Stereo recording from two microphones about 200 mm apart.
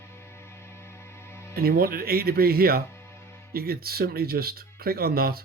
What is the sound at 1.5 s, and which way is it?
Speech, 50° right (ahead or behind).